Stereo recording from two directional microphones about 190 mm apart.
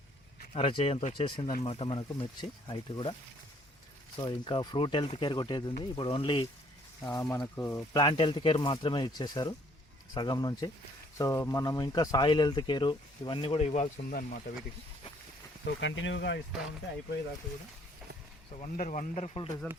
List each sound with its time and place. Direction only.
0.5 s speech: 30° left (ahead or behind)
4.2 s speech: 25° left (ahead or behind)
7.9 s speech: 25° left (ahead or behind); by 14.5 s 45° left (ahead or behind)
15.6 s speech: 75° left (ahead or behind)
18.6 s speech: 40° left (ahead or behind)